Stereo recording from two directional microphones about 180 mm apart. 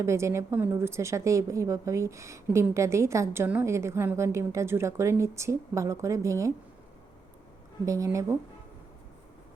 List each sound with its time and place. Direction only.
0.0 s speech: 15° right (ahead or behind)
7.9 s speech: 15° right (ahead or behind)